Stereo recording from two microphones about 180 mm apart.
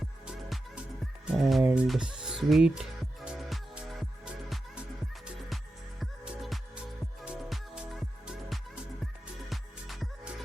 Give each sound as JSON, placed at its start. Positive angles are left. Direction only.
{"t": 1.4, "sound": "music", "side_deg": 0}
{"t": 6.0, "sound": "music", "side_deg": 0}